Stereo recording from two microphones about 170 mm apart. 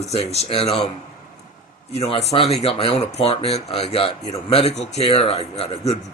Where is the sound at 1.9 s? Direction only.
35° left (ahead or behind).